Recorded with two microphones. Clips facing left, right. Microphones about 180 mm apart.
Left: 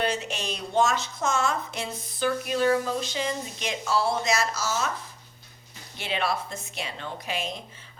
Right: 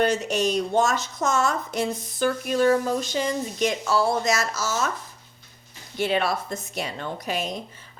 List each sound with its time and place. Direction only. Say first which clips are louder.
0.0 s speech: right 7 dB; 45° right (ahead or behind)
6.0 s speech: right 5 dB; 45° right (ahead or behind)